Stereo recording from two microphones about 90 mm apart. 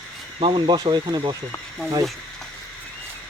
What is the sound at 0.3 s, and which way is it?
Speech, 75° right (ahead or behind).